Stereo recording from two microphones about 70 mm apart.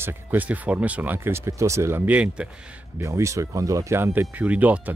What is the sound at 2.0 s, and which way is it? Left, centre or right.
Speech, centre.